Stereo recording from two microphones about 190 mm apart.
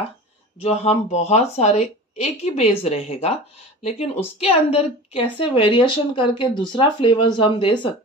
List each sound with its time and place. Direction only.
0.6 s a woman's voice: 35° left (ahead or behind)
4.4 s a woman's voice: 30° left (ahead or behind)